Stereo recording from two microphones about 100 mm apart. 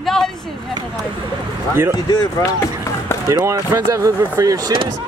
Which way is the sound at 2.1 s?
40° left (ahead or behind).